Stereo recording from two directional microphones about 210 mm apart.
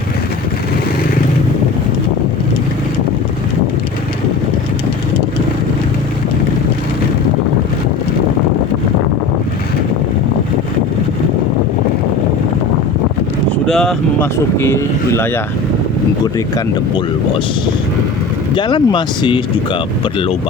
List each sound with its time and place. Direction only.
13.7 s speech: centre (ahead or behind)
18.5 s speech: 20° left (ahead or behind)